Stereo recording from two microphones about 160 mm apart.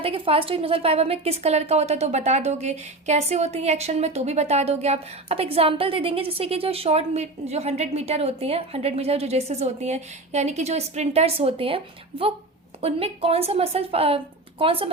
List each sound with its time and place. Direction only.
0.0 s a woman's voice: 35° right (ahead or behind)
12.8 s a woman's voice: 40° right (ahead or behind)